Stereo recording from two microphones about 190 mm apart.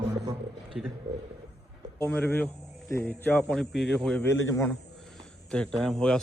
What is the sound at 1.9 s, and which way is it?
A man's voice, 10° left (ahead or behind).